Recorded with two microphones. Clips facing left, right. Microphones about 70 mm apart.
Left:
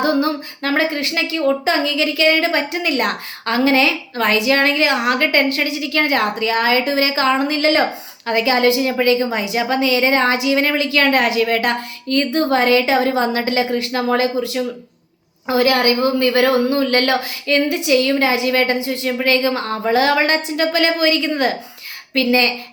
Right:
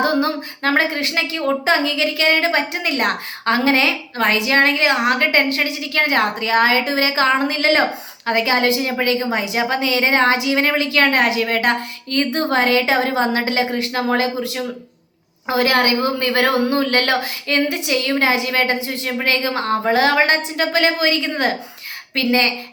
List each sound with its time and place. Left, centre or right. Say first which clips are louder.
0.0 s a woman's voice: left 1 dB; right
8.9 s a woman's voice: left 3 dB; right